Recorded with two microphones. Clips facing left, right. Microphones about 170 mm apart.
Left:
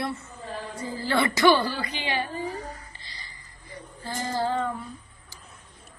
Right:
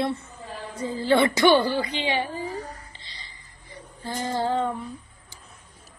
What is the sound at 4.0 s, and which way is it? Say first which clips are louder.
Speech: right 1 dB; 20° right (ahead or behind).